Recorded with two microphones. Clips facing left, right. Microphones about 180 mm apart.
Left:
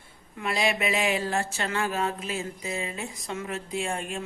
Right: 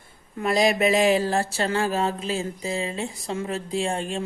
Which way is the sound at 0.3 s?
40° right (ahead or behind).